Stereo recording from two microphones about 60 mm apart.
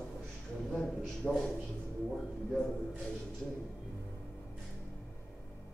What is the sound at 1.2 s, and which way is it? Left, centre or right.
Speech, centre.